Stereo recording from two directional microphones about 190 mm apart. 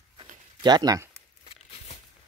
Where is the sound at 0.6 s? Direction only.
20° right (ahead or behind).